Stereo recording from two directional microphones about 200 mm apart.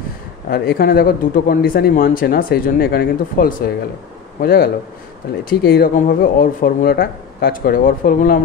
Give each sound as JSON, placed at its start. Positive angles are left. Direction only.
{"t": 0.5, "sound": "speech", "side_deg": 50}